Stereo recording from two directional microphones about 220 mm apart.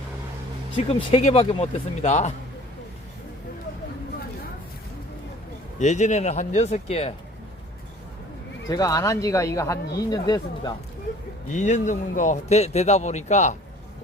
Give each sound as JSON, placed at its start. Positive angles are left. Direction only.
{"t": 0.9, "sound": "speech", "side_deg": 25}
{"t": 5.8, "sound": "a man's voice", "side_deg": 30}
{"t": 8.6, "sound": "speech", "side_deg": 15}
{"t": 11.5, "sound": "a man's voice", "side_deg": 35}